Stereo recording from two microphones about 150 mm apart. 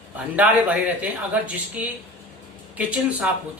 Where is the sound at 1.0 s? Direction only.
10° right (ahead or behind).